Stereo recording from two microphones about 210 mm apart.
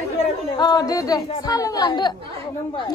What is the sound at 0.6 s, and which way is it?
Speech, 20° left (ahead or behind).